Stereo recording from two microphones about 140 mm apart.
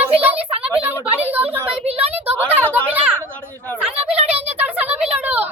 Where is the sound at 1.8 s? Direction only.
45° right (ahead or behind).